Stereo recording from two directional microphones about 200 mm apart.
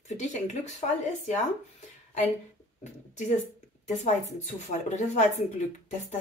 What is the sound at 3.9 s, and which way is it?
A woman's voice, 35° left (ahead or behind).